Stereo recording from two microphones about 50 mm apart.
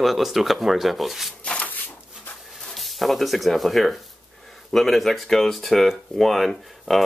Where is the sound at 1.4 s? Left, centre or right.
Left.